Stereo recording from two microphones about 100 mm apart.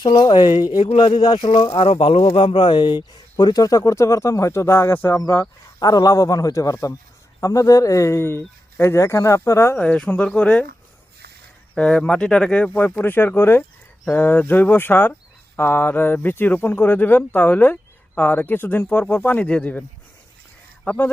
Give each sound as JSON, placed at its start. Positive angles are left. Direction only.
{"t": 0.0, "sound": "speech", "side_deg": 45}
{"t": 1.7, "sound": "speech", "side_deg": 70}
{"t": 5.8, "sound": "speech", "side_deg": 40}
{"t": 9.8, "sound": "speech", "side_deg": 10}
{"t": 11.7, "sound": "speech", "side_deg": 10}